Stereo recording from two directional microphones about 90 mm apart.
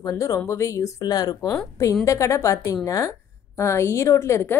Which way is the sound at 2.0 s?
35° left (ahead or behind).